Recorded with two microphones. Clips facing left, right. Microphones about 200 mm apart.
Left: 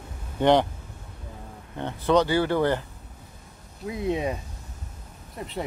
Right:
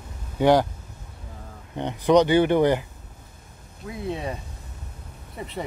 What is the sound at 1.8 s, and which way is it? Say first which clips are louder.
Speech: right 4 dB; 15° right (ahead or behind).